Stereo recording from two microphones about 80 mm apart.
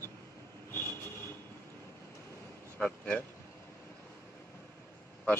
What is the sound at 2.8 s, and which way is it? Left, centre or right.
Speech, centre.